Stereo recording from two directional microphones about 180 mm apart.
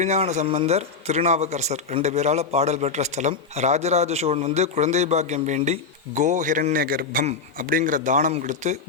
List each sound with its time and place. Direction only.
0.0 s a man's voice: 40° right (ahead or behind)